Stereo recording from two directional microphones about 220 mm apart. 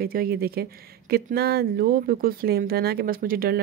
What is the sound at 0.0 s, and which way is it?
Speech, 45° right (ahead or behind).